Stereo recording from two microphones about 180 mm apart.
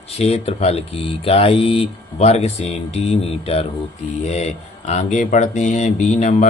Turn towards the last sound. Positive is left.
turn(degrees=40)  # may be behind; listen again after turning